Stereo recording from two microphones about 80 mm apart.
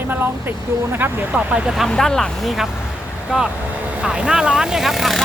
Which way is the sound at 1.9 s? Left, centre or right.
Centre.